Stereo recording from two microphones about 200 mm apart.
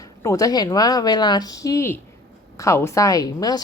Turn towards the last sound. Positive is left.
turn(degrees=20)  # may be behind; listen again after turning